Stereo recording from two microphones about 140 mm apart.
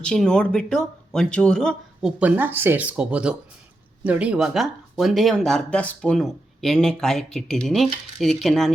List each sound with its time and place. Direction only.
0.0 s speech: 5° left (ahead or behind)